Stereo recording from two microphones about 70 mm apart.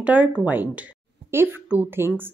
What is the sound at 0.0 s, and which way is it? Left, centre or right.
Speech, centre.